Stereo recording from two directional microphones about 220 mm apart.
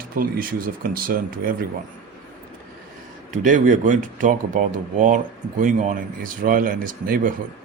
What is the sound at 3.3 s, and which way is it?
Speech, 35° right (ahead or behind).